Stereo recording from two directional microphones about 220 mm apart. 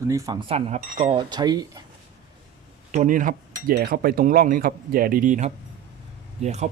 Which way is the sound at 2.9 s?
35° right (ahead or behind).